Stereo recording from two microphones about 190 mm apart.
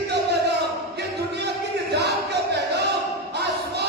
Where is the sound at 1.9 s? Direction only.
60° right (ahead or behind).